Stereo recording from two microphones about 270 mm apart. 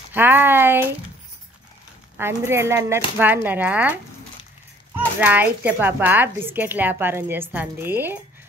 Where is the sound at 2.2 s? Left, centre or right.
Centre.